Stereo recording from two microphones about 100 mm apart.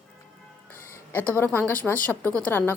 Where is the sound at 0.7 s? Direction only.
20° left (ahead or behind).